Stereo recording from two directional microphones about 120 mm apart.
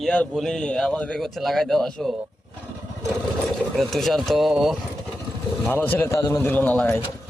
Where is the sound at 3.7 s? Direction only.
Centre (ahead or behind).